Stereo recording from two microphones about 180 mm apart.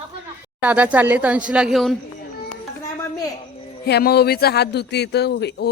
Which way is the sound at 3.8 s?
65° left (ahead or behind).